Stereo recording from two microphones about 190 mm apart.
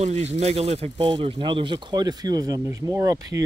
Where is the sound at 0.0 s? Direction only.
35° right (ahead or behind).